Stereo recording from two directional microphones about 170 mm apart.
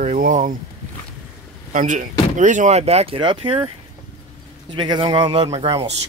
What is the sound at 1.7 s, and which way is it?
Speech, 50° right (ahead or behind).